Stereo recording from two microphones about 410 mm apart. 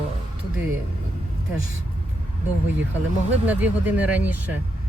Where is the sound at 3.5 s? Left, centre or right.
Centre.